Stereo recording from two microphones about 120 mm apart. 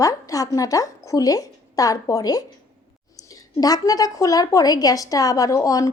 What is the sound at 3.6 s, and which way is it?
A woman's voice, 30° left (ahead or behind).